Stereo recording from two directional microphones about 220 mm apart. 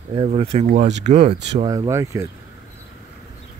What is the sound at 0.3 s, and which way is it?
Speech, 30° right (ahead or behind).